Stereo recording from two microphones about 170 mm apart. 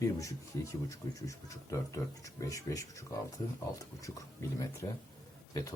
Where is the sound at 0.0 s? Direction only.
20° left (ahead or behind).